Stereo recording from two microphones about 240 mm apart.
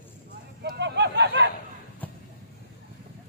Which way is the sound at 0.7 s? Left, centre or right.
Right.